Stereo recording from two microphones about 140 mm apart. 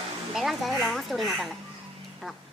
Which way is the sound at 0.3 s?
Centre (ahead or behind).